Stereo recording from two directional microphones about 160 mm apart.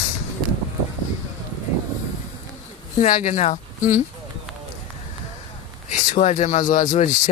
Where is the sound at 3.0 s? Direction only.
50° left (ahead or behind).